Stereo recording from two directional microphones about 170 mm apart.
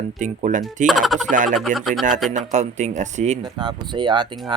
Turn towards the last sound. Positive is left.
turn(degrees=-30)  # may be behind; listen again after turning